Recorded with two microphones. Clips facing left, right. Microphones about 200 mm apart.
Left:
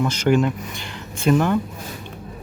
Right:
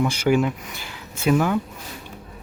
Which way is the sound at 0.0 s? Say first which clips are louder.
Left 1 dB; 10° right (ahead or behind).